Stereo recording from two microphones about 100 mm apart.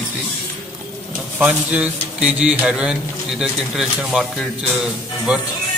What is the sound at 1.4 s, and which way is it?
Speech, 15° right (ahead or behind).